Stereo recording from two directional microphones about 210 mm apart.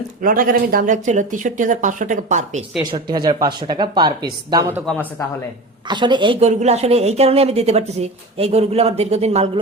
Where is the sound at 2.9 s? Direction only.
20° right (ahead or behind).